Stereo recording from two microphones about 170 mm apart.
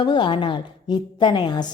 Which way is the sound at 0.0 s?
30° left (ahead or behind).